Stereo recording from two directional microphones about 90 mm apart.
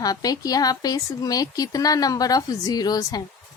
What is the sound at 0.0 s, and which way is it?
A woman's voice, 45° left (ahead or behind).